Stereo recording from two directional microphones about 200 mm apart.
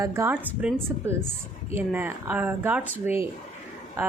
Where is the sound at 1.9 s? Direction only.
10° right (ahead or behind).